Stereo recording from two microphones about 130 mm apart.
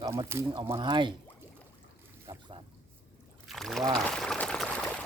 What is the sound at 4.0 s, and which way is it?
Pour, 5° left (ahead or behind).